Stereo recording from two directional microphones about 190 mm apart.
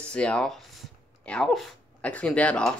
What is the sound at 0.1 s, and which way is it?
Speech, 5° left (ahead or behind).